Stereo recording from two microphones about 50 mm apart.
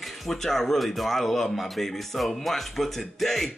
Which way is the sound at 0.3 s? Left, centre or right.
Centre.